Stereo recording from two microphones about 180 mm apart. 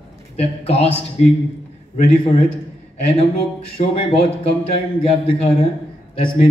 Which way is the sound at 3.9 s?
30° left (ahead or behind).